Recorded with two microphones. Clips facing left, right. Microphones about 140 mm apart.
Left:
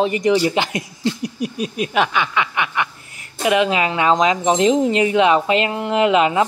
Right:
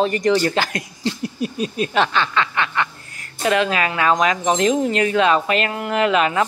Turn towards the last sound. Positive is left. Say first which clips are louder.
# left 2 dB
turn(degrees=20)  # may be behind; listen again after turning